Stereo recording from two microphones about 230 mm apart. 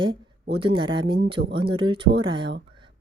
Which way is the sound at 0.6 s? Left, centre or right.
Right.